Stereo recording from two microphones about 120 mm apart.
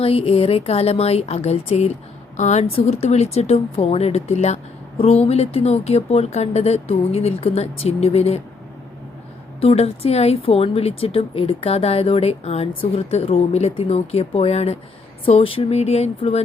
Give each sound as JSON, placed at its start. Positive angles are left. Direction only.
{"t": 0.0, "sound": "a woman's voice", "side_deg": 55}
{"t": 2.3, "sound": "a woman's voice", "side_deg": 80}
{"t": 9.6, "sound": "a woman's voice", "side_deg": 60}